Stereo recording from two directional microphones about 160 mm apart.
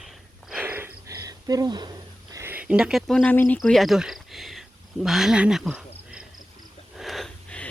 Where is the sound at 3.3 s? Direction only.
15° left (ahead or behind).